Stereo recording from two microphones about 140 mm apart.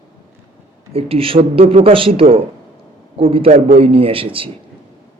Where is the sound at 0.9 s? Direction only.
45° right (ahead or behind).